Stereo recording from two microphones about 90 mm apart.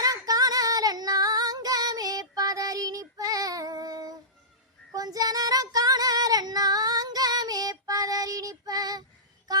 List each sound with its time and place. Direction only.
0.0 s female singing: 45° right (ahead or behind)